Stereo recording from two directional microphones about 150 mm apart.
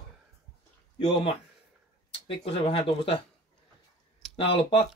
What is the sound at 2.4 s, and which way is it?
Speech, 35° left (ahead or behind).